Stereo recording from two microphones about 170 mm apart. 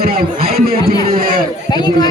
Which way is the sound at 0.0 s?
60° right (ahead or behind).